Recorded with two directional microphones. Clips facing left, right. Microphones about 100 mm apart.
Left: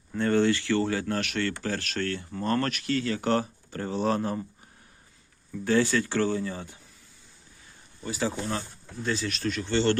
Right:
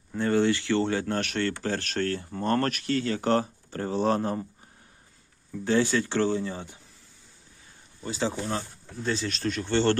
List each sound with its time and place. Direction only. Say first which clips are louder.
0.1 s speech: even; 15° right (ahead or behind); by 4.4 s 35° right (ahead or behind)
5.6 s speech: even; 20° right (ahead or behind)
8.0 s speech: even; 25° right (ahead or behind)